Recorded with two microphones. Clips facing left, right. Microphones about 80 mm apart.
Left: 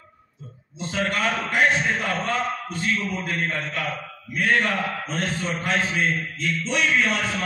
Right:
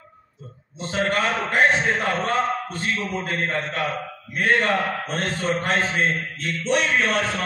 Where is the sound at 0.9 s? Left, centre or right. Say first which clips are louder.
Right 2 dB; right.